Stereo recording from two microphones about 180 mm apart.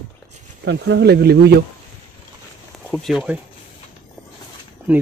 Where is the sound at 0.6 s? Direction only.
75° right (ahead or behind).